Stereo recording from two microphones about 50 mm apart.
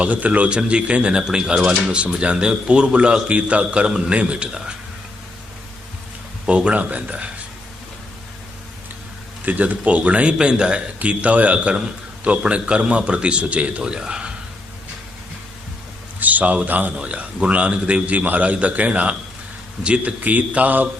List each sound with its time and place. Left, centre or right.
0.0 s speech: right
6.5 s speech: right
9.5 s speech: right
16.2 s a man's voice: right
16.9 s speech: right